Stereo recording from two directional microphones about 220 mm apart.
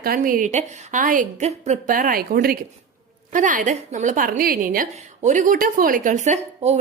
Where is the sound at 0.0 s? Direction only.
40° right (ahead or behind).